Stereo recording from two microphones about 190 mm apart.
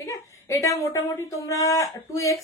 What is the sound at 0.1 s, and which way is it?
Speech, 15° left (ahead or behind).